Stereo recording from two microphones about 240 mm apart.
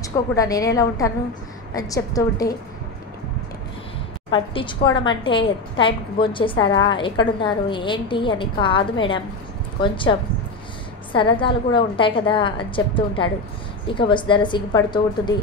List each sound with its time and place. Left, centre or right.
0.0 s a woman's voice: centre
4.3 s a woman's voice: left